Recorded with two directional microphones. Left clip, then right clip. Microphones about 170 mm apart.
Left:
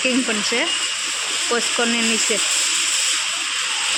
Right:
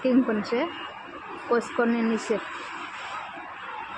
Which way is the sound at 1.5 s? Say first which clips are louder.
Left 2 dB; 20° left (ahead or behind).